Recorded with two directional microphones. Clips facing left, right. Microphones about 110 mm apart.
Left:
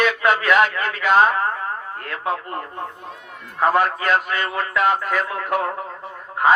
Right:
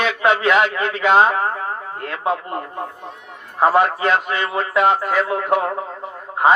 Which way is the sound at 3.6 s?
25° right (ahead or behind).